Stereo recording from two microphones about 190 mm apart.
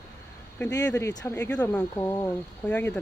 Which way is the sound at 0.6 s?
15° left (ahead or behind).